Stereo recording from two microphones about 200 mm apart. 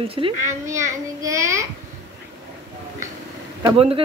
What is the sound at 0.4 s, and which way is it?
A child's voice, 15° right (ahead or behind).